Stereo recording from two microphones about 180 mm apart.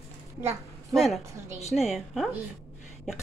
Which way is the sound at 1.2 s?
15° right (ahead or behind).